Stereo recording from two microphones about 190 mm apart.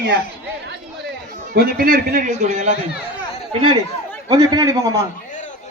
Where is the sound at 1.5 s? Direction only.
50° right (ahead or behind).